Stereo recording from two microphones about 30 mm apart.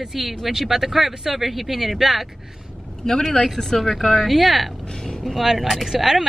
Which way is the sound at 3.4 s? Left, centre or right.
Left.